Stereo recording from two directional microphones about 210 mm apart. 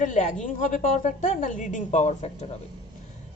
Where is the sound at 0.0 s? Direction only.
35° left (ahead or behind).